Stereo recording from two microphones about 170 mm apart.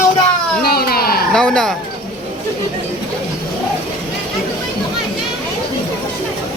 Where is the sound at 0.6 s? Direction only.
65° left (ahead or behind).